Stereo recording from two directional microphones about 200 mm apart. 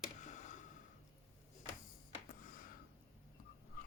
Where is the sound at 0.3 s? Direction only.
40° left (ahead or behind).